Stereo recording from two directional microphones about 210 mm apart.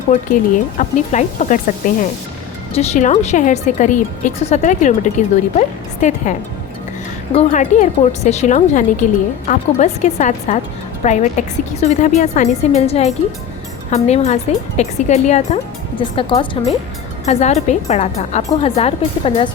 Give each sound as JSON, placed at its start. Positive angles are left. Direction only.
{"t": 0.1, "sound": "a woman's voice", "side_deg": 35}
{"t": 2.7, "sound": "a woman's voice", "side_deg": 35}
{"t": 7.3, "sound": "a woman's voice", "side_deg": 35}